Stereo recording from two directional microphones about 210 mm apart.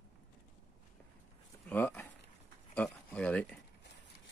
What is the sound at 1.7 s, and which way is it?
Speech, 10° left (ahead or behind).